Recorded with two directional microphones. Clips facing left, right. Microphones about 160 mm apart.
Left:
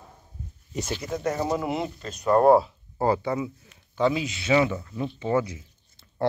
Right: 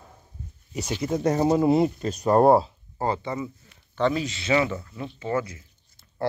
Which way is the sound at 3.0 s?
5° left (ahead or behind).